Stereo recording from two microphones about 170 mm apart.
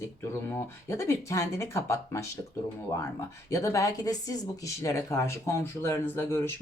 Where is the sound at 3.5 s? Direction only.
20° left (ahead or behind).